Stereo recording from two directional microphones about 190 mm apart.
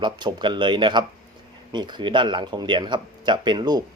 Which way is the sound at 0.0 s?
25° right (ahead or behind).